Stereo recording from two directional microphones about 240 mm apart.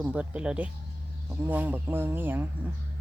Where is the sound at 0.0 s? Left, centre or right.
Centre.